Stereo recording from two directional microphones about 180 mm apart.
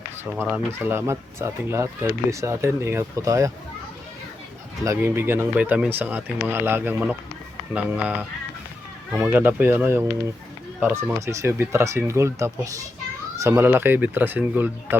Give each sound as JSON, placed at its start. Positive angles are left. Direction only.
{"t": 0.3, "sound": "speech", "side_deg": -5}
{"t": 4.8, "sound": "speech", "side_deg": -15}